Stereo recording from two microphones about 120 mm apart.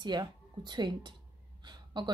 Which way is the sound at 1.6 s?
40° right (ahead or behind).